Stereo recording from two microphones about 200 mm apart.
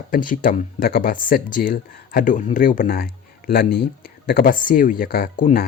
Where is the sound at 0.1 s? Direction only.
45° left (ahead or behind).